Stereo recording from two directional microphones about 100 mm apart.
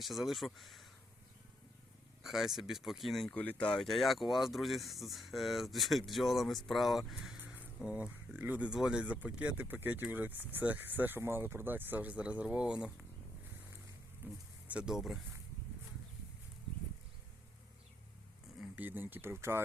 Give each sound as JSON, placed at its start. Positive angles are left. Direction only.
{"t": 0.0, "sound": "speech", "side_deg": 0}
{"t": 2.2, "sound": "speech", "side_deg": -5}
{"t": 3.3, "sound": "speech", "side_deg": 15}
{"t": 7.4, "sound": "a sound", "side_deg": -15}
{"t": 7.9, "sound": "speech", "side_deg": -10}
{"t": 14.2, "sound": "speech", "side_deg": -20}
{"t": 14.7, "sound": "speech", "side_deg": -10}
{"t": 18.8, "sound": "speech", "side_deg": -20}